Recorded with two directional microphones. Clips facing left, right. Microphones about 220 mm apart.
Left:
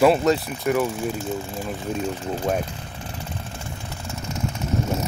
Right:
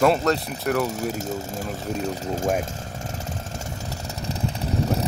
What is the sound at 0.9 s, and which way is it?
Speech, 40° right (ahead or behind).